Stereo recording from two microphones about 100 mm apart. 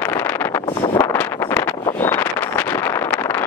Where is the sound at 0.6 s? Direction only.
55° left (ahead or behind).